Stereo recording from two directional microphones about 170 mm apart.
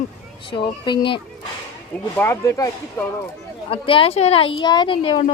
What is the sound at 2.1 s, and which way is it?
Speech, 15° left (ahead or behind).